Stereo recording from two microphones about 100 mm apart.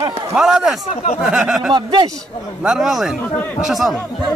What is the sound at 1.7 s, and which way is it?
Speech, 45° right (ahead or behind).